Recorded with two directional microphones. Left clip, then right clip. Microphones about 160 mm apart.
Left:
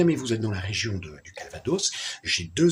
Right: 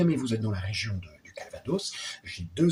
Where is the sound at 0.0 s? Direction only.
20° left (ahead or behind).